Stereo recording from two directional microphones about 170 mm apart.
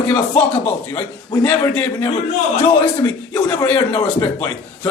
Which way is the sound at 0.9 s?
20° left (ahead or behind).